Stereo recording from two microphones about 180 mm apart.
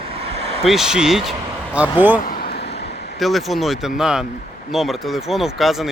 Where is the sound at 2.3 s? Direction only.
60° left (ahead or behind).